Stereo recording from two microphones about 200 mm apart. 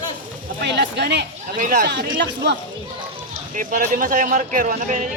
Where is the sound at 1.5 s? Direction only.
40° right (ahead or behind).